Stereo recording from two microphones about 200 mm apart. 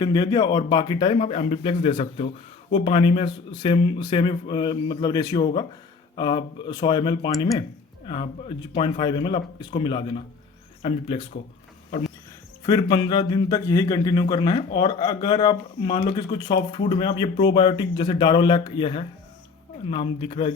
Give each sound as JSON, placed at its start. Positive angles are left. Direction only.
{"t": 0.0, "sound": "a man's voice", "side_deg": 20}
{"t": 12.6, "sound": "a man's voice", "side_deg": 20}